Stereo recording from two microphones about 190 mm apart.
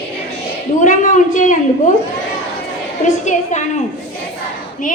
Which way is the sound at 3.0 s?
40° left (ahead or behind).